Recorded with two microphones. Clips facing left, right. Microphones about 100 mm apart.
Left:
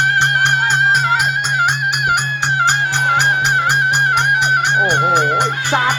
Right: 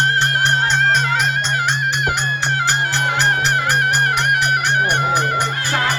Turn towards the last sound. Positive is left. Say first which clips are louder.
# left 4 dB
turn(degrees=20)  # may be behind; listen again after turning